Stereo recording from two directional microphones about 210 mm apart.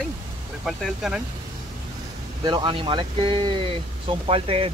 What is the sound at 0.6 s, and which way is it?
Speech, centre (ahead or behind).